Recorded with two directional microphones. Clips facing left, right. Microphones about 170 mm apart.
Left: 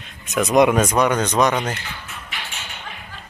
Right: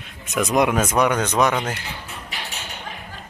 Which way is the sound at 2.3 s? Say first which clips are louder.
Even; 35° right (ahead or behind).